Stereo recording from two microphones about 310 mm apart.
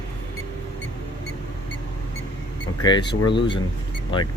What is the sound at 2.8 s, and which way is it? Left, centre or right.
Speech, centre.